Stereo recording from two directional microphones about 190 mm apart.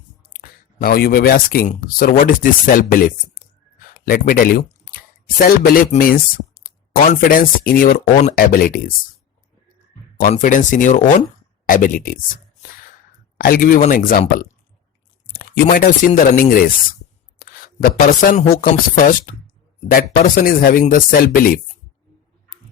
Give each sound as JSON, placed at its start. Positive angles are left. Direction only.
{"t": 0.4, "sound": "speech", "side_deg": 50}
{"t": 10.2, "sound": "speech", "side_deg": 45}
{"t": 13.4, "sound": "speech", "side_deg": 50}